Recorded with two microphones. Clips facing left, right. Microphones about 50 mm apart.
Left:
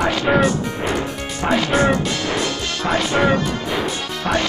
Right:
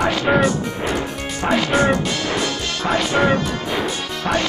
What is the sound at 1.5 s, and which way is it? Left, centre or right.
Speech, centre.